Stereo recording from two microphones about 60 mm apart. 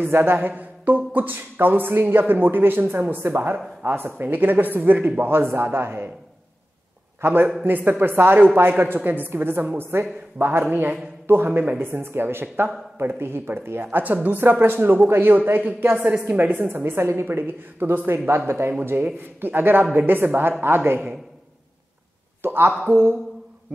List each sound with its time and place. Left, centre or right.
0.0 s speech: right
5.2 s speech: right
7.2 s a man's voice: right
13.8 s a woman's voice: right
16.5 s speech: right
17.3 s speech: right
22.4 s a woman's voice: right